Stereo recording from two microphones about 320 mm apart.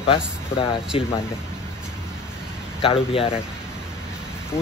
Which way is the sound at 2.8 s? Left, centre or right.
Centre.